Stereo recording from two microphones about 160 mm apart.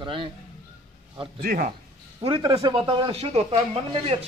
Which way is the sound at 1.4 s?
60° right (ahead or behind).